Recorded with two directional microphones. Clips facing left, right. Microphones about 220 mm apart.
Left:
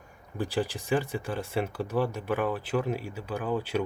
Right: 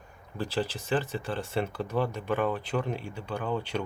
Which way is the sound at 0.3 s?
15° left (ahead or behind).